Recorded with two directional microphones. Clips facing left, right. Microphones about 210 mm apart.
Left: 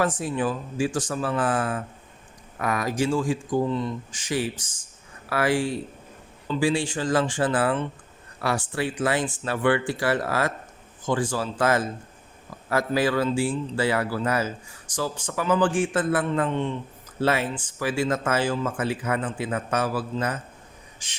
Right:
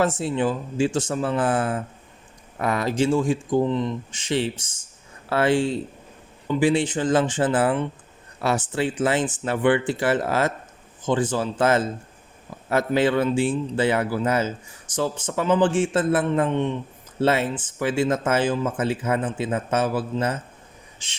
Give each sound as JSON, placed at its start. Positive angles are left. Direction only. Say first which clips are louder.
{"t": 0.0, "sound": "a man's voice", "louder": "right 3 dB", "side_deg": -25}